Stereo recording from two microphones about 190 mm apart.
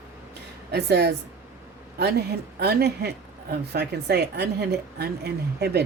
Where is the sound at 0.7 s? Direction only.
60° right (ahead or behind).